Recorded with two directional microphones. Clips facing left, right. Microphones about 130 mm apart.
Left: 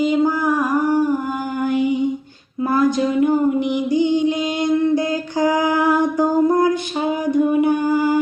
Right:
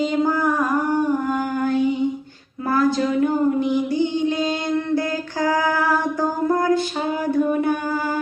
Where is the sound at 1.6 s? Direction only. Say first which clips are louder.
Left 2 dB; 15° left (ahead or behind).